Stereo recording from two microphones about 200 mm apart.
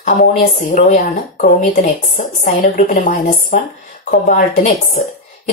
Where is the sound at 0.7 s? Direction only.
35° left (ahead or behind).